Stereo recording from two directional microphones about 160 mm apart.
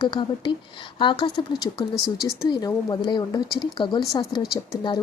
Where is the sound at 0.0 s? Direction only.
30° left (ahead or behind).